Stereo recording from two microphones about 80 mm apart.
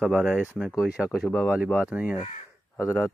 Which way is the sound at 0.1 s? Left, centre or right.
Right.